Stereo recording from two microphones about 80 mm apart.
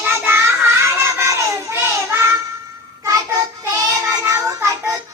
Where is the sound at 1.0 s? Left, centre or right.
Right.